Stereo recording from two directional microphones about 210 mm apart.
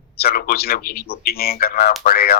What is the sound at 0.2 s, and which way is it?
A man's voice, 45° left (ahead or behind).